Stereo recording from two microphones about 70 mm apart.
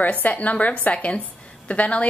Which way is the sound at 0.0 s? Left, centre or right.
Left.